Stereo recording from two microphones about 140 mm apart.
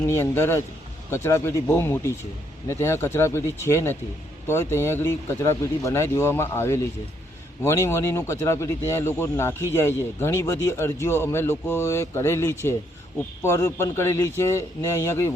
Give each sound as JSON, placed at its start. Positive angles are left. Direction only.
{"t": 0.1, "sound": "speech", "side_deg": 20}